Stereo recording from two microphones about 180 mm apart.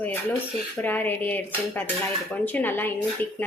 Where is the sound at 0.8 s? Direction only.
10° left (ahead or behind).